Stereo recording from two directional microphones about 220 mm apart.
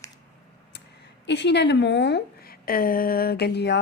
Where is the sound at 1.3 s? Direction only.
50° left (ahead or behind).